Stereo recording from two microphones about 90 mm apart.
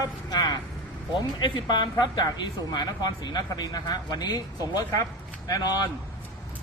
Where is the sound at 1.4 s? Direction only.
60° left (ahead or behind); by 5.9 s 45° left (ahead or behind).